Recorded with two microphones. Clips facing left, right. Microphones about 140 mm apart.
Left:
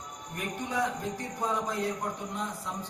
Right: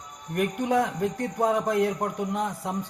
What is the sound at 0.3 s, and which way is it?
Speech, 60° right (ahead or behind).